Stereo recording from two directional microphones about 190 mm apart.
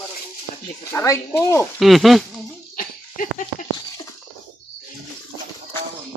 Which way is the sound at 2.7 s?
45° left (ahead or behind).